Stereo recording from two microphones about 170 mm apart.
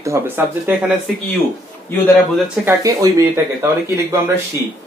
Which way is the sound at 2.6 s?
20° right (ahead or behind).